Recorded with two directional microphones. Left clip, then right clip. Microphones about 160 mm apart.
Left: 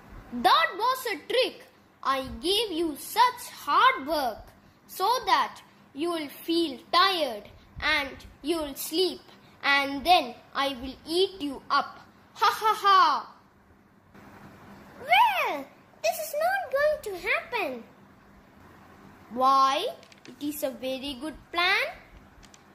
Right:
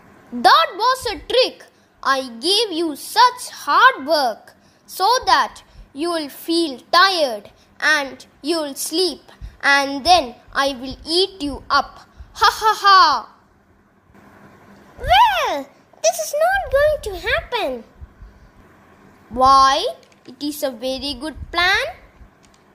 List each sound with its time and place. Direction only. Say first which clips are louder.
0.4 s a child's voice: right 9 dB; 50° right (ahead or behind)
15.0 s a child's voice: right 8 dB; 55° right (ahead or behind)
19.3 s a child's voice: right 10 dB; 50° right (ahead or behind)